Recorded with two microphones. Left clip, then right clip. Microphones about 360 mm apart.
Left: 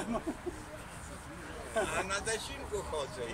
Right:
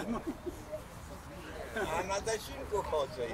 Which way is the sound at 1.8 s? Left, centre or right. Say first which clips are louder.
Even; centre.